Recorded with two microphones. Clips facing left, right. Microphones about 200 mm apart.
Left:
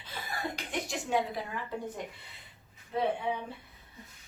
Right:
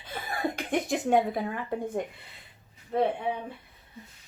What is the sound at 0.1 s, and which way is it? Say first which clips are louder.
Speech: right 6 dB; 55° right (ahead or behind).